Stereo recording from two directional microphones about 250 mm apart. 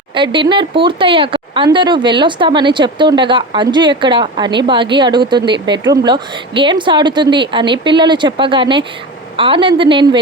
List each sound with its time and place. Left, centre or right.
0.1 s speech: centre